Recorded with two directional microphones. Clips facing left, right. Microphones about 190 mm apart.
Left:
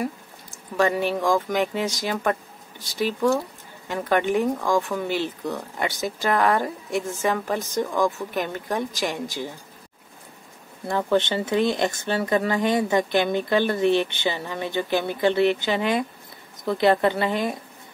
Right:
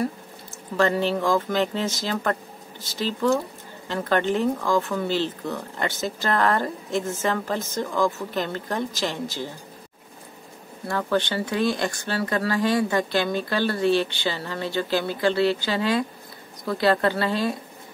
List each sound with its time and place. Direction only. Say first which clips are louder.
0.7 s speech: even; 10° left (ahead or behind)
10.9 s speech: left 2 dB; 20° left (ahead or behind)